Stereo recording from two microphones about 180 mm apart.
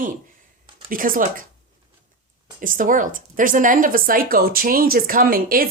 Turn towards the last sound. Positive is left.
turn(degrees=-55)  # may be behind; listen again after turning